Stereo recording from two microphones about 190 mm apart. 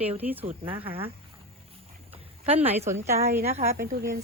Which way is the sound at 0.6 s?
30° right (ahead or behind).